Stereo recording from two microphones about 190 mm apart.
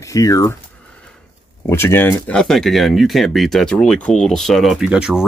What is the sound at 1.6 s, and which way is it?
Speech, 10° left (ahead or behind).